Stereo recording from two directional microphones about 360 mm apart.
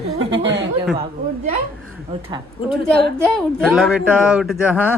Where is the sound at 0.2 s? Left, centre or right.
Centre.